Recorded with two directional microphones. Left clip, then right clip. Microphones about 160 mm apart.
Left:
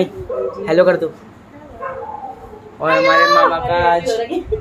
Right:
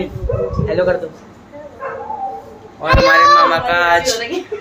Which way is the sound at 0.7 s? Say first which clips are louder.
Left 4 dB; 90° left.